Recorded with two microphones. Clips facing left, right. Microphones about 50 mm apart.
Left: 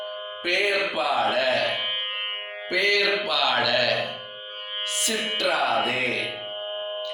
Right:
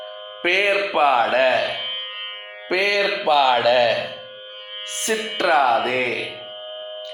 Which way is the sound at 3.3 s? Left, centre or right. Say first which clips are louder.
Right 7 dB; right.